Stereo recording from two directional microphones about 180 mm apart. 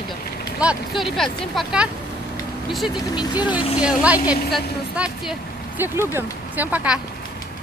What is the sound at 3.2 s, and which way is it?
Speech, 25° left (ahead or behind).